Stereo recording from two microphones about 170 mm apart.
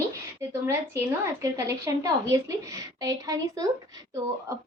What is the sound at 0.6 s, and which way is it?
A child's voice, 15° right (ahead or behind).